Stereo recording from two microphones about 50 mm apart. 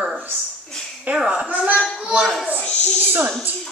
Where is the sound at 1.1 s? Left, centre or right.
Centre.